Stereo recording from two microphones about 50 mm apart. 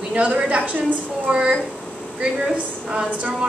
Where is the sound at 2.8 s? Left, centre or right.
Centre.